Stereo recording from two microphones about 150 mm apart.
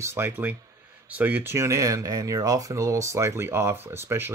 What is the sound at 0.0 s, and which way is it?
Speech, 15° right (ahead or behind).